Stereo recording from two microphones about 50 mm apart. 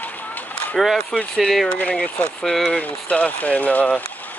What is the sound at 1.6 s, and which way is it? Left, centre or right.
Speech, left.